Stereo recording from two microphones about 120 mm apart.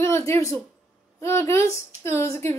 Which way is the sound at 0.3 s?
30° left (ahead or behind).